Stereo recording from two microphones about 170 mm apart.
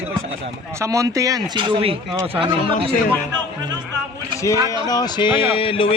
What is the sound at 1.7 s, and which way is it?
Speech, 35° right (ahead or behind).